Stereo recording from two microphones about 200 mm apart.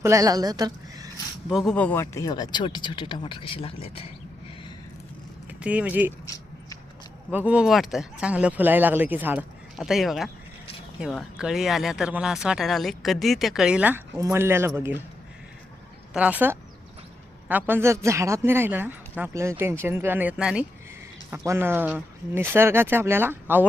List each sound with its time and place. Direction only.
0.0 s a woman's voice: 15° right (ahead or behind)
1.5 s speech: centre (ahead or behind); by 3.9 s 30° left (ahead or behind)
5.5 s speech: 5° right (ahead or behind)
6.2 s a sound: 15° left (ahead or behind)
7.3 s speech: 5° right (ahead or behind)
16.1 s speech: 5° right (ahead or behind)